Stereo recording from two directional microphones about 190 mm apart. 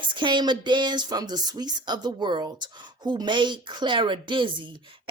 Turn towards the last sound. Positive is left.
turn(degrees=-25)  # may be behind; listen again after turning